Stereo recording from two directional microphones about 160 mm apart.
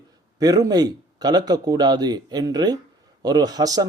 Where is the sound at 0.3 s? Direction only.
20° right (ahead or behind).